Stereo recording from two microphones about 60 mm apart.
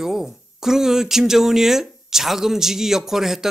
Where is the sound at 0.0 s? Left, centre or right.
Centre.